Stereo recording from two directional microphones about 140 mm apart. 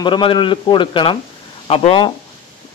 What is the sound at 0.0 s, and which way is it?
A man's voice, 35° left (ahead or behind).